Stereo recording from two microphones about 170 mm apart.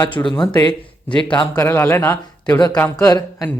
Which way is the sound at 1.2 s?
25° left (ahead or behind).